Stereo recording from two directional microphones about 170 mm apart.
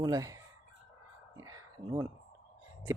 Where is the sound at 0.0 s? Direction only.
20° right (ahead or behind).